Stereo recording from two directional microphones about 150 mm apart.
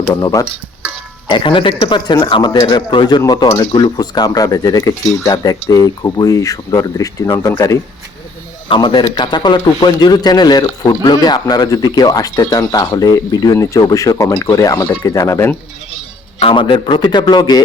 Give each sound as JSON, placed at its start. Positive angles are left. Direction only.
{"t": 0.1, "sound": "a man's voice", "side_deg": 25}
{"t": 16.4, "sound": "a man's voice", "side_deg": 35}